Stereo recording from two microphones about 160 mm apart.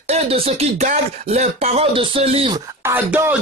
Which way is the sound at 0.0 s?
40° right (ahead or behind).